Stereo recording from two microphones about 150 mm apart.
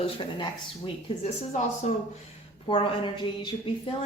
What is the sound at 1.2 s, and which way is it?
Speech, 50° left (ahead or behind).